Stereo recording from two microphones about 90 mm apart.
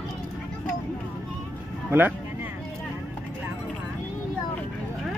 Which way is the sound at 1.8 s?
20° right (ahead or behind).